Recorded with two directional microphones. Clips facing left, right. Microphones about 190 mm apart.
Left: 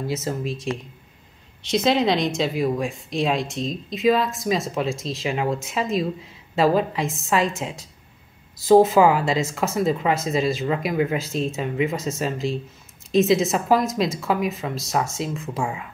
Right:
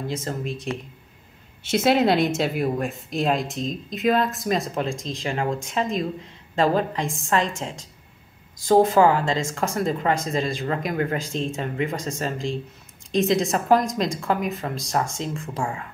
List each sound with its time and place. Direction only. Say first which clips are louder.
0.0 s speech: left 2 dB; 5° left (ahead or behind)